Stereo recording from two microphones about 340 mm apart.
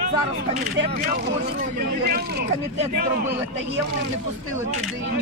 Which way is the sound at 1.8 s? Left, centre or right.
Right.